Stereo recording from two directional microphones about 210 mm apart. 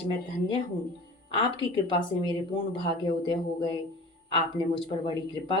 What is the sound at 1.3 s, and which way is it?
Speech, 20° left (ahead or behind).